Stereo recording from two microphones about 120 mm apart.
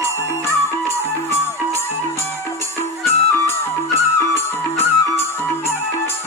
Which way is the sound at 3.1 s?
20° left (ahead or behind).